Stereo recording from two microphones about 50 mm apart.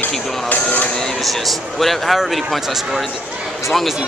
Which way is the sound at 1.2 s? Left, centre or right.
Centre.